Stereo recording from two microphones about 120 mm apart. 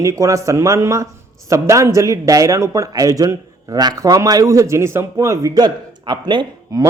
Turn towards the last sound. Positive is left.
turn(degrees=-35)  # may be behind; listen again after turning